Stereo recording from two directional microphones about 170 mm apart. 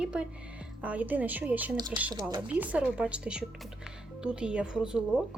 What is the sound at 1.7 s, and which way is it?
Speech, 25° right (ahead or behind).